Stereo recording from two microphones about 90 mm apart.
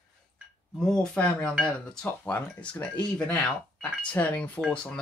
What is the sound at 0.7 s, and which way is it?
Speech, 5° left (ahead or behind).